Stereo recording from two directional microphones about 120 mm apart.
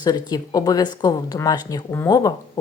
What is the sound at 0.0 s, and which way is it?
Speech, 35° left (ahead or behind).